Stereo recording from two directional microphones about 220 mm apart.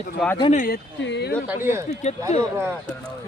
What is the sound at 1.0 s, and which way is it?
Speech, 50° left (ahead or behind).